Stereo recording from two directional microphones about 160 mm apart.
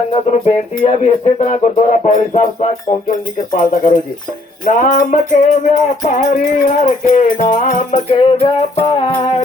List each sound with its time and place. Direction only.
0.1 s music: 35° left (ahead or behind)
0.9 s music: 45° left (ahead or behind)
3.1 s music: 60° left (ahead or behind)
8.1 s music: 35° left (ahead or behind)